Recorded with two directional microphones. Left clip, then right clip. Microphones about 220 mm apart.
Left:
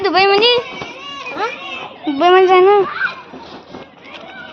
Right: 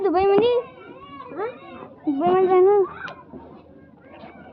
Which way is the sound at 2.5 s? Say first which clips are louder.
Left 6 dB; 15° left (ahead or behind).